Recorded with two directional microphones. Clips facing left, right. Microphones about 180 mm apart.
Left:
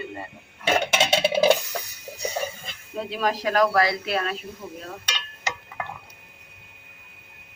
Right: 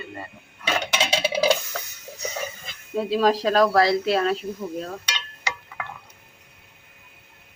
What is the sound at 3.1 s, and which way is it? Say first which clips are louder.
Speech: right 4 dB; 30° right (ahead or behind).